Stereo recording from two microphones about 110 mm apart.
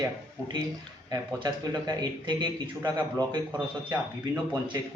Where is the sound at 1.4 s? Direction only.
40° right (ahead or behind).